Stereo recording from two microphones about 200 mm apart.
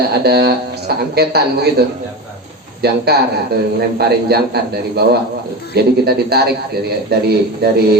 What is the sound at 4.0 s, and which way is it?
A man's voice, 55° right (ahead or behind).